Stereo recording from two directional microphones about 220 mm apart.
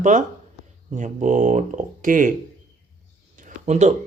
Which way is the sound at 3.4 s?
30° right (ahead or behind).